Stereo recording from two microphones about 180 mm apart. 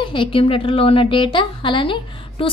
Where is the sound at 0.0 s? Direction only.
25° left (ahead or behind).